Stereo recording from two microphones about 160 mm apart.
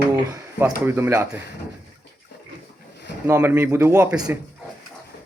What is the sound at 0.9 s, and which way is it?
Speech, 15° right (ahead or behind).